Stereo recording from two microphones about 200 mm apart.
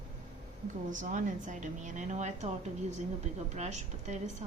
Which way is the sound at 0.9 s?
40° right (ahead or behind).